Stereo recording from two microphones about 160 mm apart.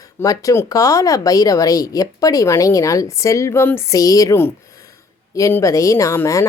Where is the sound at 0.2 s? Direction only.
20° left (ahead or behind).